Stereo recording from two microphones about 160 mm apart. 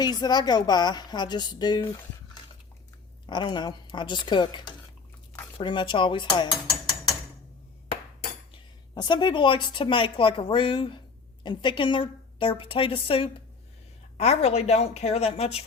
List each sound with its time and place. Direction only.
0.0 s a woman's voice: 25° left (ahead or behind)
3.2 s a woman's voice: 30° left (ahead or behind)
8.5 s a woman's voice: 30° left (ahead or behind)